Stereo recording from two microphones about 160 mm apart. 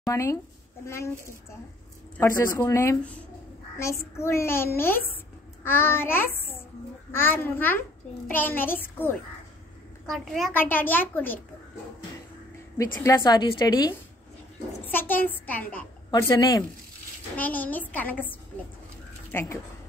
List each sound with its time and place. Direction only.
0.1 s a woman's voice: 20° left (ahead or behind)
10.1 s a woman's voice: centre (ahead or behind)
10.5 s a child's voice: 10° left (ahead or behind)
13.0 s a woman's voice: 25° left (ahead or behind)
14.9 s a child's voice: 10° left (ahead or behind)
16.1 s a woman's voice: 20° left (ahead or behind)
17.4 s a child's voice: 10° left (ahead or behind)